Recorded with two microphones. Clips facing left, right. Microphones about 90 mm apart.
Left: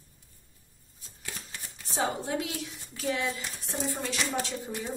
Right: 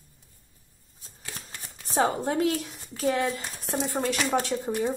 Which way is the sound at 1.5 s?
45° right (ahead or behind).